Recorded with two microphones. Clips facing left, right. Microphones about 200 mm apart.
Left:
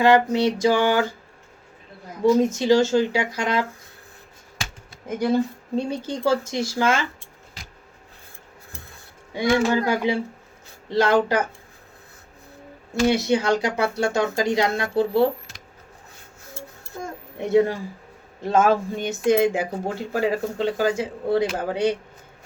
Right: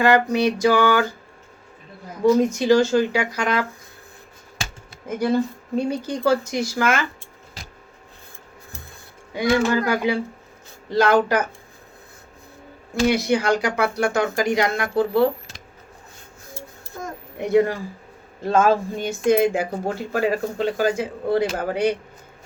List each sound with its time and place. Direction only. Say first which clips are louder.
0.0 s speech: even; 25° left (ahead or behind)
2.4 s speech: right 1 dB; 25° left (ahead or behind)
5.0 s speech: even; 20° left (ahead or behind)
9.3 s speech: right 1 dB; 25° left (ahead or behind)
12.9 s speech: even; 25° left (ahead or behind)
17.4 s speech: right 1 dB; 25° left (ahead or behind)